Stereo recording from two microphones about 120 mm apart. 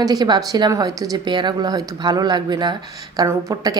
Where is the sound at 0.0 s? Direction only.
35° right (ahead or behind).